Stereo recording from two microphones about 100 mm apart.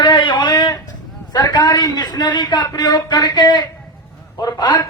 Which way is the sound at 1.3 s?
40° left (ahead or behind).